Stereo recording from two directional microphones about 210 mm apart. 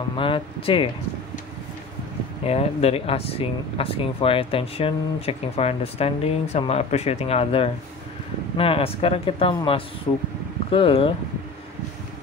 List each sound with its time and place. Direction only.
0.2 s speech: 25° left (ahead or behind)
2.4 s speech: 30° left (ahead or behind)